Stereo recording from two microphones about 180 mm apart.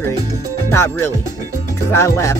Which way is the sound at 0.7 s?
15° left (ahead or behind).